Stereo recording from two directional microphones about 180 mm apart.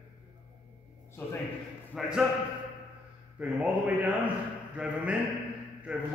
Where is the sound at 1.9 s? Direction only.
Centre (ahead or behind).